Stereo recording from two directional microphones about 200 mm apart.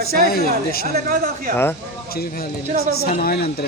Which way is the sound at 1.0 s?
50° right (ahead or behind).